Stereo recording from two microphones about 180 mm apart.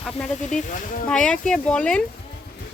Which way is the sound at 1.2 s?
5° left (ahead or behind).